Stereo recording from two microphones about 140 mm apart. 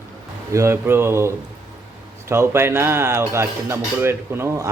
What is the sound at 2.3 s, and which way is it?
Speech, 20° right (ahead or behind).